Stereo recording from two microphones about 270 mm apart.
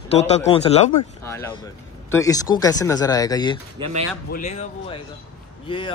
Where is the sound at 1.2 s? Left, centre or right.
Centre.